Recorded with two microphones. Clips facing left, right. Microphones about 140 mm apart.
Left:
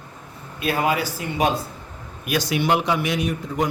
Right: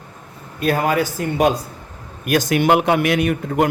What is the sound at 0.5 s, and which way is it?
A man's voice, 45° right (ahead or behind).